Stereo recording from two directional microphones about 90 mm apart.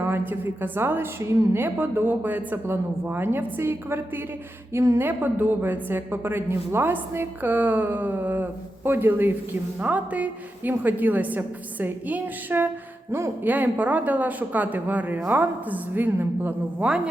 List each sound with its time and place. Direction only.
0.0 s a woman's voice: 25° right (ahead or behind)
5.0 s a woman's voice: 20° right (ahead or behind)